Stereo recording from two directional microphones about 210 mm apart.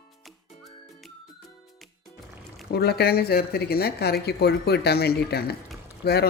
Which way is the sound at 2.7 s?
50° left (ahead or behind).